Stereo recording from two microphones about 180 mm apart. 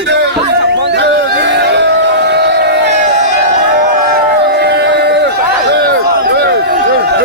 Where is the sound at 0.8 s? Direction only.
70° right (ahead or behind).